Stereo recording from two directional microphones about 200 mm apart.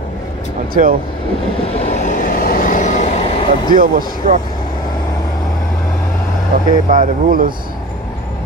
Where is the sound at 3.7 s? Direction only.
45° right (ahead or behind).